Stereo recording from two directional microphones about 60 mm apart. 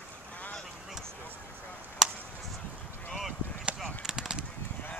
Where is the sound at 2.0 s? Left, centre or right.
Centre.